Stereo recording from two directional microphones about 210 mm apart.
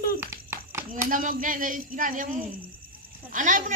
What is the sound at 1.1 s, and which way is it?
A woman's voice, 40° right (ahead or behind).